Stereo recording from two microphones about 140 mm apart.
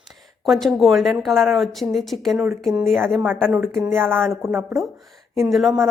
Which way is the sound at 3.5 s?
15° right (ahead or behind).